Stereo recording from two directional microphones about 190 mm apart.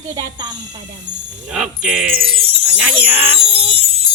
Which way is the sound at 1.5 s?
5° right (ahead or behind).